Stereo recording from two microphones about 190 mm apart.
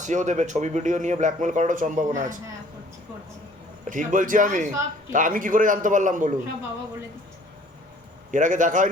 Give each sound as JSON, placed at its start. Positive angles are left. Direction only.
{"t": 0.0, "sound": "a man's voice", "side_deg": -40}
{"t": 3.8, "sound": "a man's voice", "side_deg": -45}
{"t": 8.3, "sound": "a man's voice", "side_deg": -40}